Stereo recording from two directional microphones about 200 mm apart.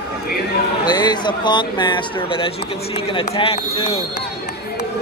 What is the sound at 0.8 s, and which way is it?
A man's voice, 20° left (ahead or behind).